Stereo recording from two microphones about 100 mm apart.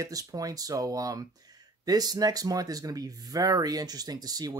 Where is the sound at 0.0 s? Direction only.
35° right (ahead or behind).